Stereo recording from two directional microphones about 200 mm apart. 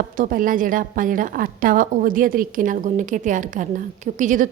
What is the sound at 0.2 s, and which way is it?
A woman's voice, 45° right (ahead or behind).